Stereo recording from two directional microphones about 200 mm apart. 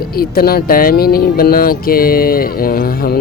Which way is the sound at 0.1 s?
50° left (ahead or behind).